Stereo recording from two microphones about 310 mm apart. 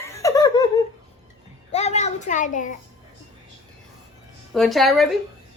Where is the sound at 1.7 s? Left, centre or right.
Left.